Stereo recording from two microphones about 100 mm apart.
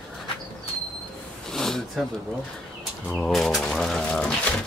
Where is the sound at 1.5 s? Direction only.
5° left (ahead or behind).